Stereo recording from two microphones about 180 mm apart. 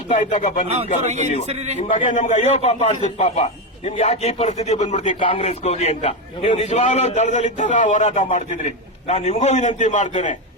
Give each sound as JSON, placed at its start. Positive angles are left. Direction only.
{"t": 0.1, "sound": "a man's voice", "side_deg": 40}
{"t": 1.0, "sound": "speech", "side_deg": -40}
{"t": 1.9, "sound": "a man's voice", "side_deg": 45}